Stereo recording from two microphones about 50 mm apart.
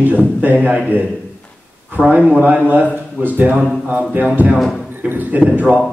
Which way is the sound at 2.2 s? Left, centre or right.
Right.